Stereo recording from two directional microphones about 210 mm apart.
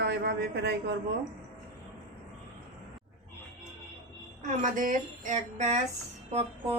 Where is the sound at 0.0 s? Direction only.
50° right (ahead or behind).